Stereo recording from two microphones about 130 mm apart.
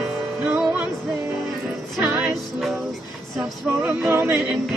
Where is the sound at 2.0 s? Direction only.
10° right (ahead or behind).